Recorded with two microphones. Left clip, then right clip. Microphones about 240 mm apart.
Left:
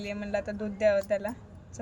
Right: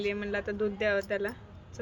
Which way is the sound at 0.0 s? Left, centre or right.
Centre.